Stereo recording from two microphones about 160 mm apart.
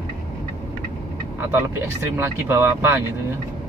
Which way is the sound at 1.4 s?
15° right (ahead or behind).